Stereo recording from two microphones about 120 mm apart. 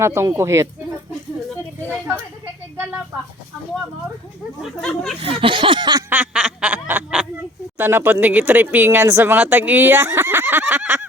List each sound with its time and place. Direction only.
0.0 s speech: 25° right (ahead or behind)
4.6 s speech: 5° left (ahead or behind)
5.2 s a sound: 45° right (ahead or behind)
6.1 s snicker: 10° right (ahead or behind)
7.8 s speech: 15° right (ahead or behind)